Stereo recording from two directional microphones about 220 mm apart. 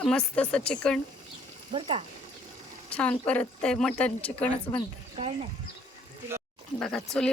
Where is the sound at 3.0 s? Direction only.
5° left (ahead or behind).